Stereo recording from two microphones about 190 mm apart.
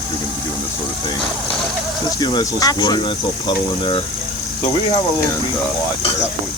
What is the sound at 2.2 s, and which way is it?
Speech, 20° left (ahead or behind).